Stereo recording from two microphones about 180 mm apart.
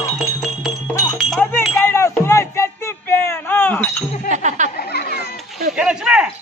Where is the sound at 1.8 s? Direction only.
15° left (ahead or behind).